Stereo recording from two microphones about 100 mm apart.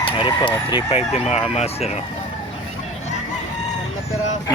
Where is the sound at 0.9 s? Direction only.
90° left.